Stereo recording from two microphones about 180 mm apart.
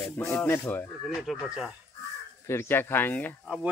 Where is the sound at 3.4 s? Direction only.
5° right (ahead or behind).